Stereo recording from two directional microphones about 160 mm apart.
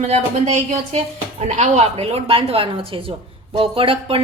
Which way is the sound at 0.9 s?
45° right (ahead or behind).